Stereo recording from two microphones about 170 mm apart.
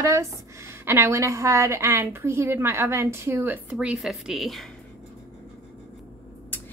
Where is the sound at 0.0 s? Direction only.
15° right (ahead or behind); by 4.6 s centre (ahead or behind).